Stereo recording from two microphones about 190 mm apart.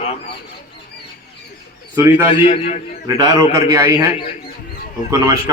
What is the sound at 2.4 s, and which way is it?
Speech, 30° left (ahead or behind).